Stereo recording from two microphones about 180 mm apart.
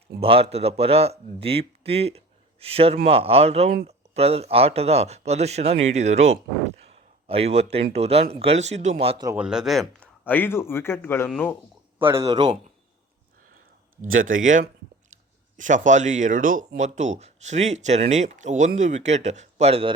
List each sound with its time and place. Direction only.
0.2 s speech: 30° right (ahead or behind)
9.2 s speech: 10° right (ahead or behind); by 11.5 s 10° left (ahead or behind)
11.9 s a man's voice: 15° right (ahead or behind)
14.3 s speech: 50° right (ahead or behind)
15.5 s speech: 45° right (ahead or behind)